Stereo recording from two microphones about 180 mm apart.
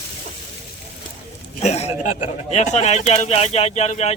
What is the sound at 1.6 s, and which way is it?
A man's voice, 35° left (ahead or behind).